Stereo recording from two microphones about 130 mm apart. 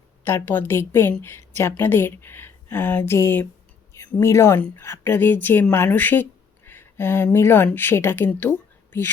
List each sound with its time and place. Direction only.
0.3 s speech: 15° left (ahead or behind)